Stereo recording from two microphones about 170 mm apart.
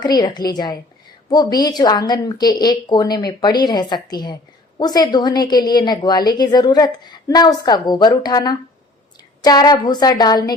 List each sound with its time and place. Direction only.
0.0 s a woman's voice: 25° left (ahead or behind)